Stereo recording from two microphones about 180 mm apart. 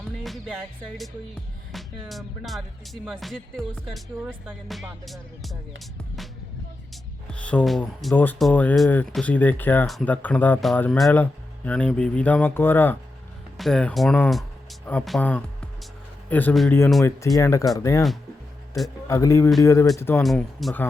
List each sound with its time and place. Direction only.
0.2 s music: centre (ahead or behind)
7.3 s speech: 5° left (ahead or behind)
13.6 s music: 5° left (ahead or behind)
14.8 s speech: 5° left (ahead or behind)
19.0 s speech: 15° left (ahead or behind)
20.2 s music: centre (ahead or behind)